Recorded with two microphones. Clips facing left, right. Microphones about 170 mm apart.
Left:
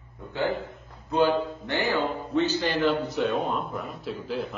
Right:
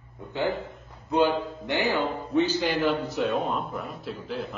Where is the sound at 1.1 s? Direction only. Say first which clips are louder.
Even; 15° right (ahead or behind).